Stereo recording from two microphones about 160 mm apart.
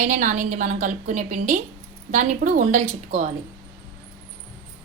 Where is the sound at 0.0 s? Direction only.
50° right (ahead or behind).